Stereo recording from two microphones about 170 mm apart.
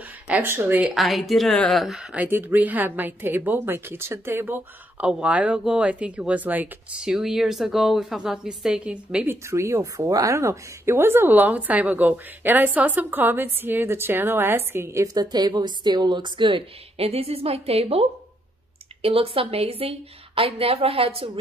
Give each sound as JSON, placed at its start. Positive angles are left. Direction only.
{"t": 0.3, "sound": "speech", "side_deg": -10}
{"t": 19.0, "sound": "a woman's voice", "side_deg": -35}